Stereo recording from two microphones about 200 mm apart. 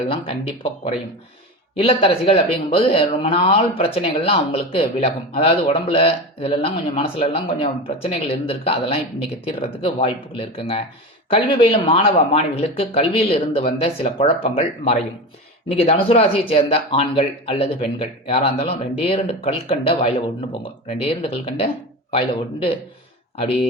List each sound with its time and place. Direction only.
0.1 s speech: 25° left (ahead or behind)